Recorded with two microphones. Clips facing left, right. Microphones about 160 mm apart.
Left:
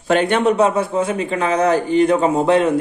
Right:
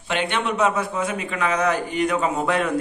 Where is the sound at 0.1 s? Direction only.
45° left (ahead or behind).